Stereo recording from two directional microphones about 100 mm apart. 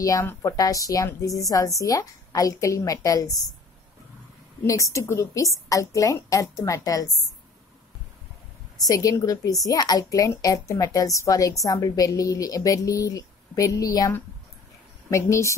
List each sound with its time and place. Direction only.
0.0 s a woman's voice: 35° left (ahead or behind)
4.6 s a woman's voice: 30° left (ahead or behind)
8.7 s a woman's voice: 35° left (ahead or behind)